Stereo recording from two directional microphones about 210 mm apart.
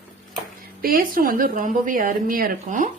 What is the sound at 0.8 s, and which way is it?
A woman's voice, 40° right (ahead or behind).